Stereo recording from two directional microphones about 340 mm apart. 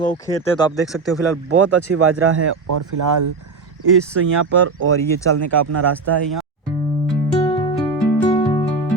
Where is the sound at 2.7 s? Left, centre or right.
Right.